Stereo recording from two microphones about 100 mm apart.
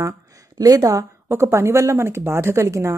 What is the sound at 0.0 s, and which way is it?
Speech, 35° right (ahead or behind).